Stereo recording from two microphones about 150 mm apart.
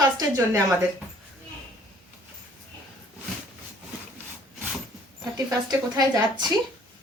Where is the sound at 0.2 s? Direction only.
20° right (ahead or behind).